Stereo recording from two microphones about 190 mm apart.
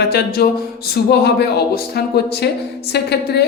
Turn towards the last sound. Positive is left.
turn(degrees=60)  # may be behind; listen again after turning